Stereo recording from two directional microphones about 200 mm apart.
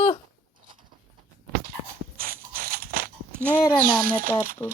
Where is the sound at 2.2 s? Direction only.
45° right (ahead or behind).